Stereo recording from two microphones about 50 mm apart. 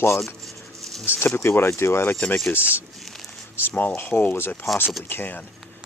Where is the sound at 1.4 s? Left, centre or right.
Left.